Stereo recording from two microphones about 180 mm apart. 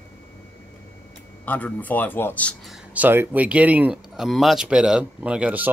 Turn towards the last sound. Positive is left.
turn(degrees=-5)  # may be behind; listen again after turning